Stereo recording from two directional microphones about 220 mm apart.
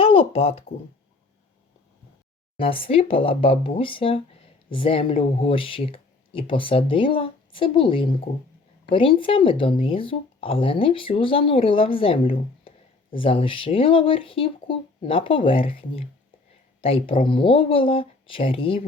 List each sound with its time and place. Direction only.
0.0 s speech: 25° left (ahead or behind)
2.6 s speech: 25° left (ahead or behind)